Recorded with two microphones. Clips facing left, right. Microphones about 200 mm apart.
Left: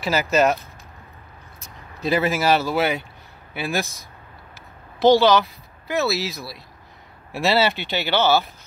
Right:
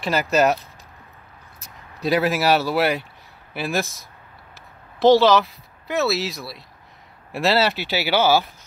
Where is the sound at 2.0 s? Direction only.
Centre (ahead or behind).